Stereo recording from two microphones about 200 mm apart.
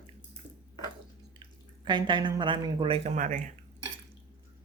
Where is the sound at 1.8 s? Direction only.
20° right (ahead or behind).